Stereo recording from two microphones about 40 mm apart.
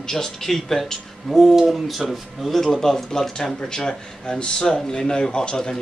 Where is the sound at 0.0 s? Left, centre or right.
Centre.